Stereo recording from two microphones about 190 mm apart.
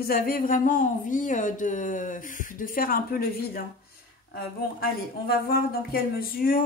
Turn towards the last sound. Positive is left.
turn(degrees=50)  # may be behind; listen again after turning